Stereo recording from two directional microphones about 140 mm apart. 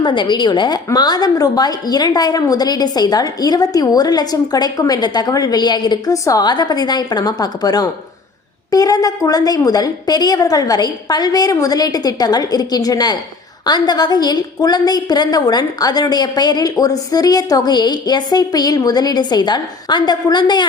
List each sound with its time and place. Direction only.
0.0 s a woman's voice: 35° left (ahead or behind)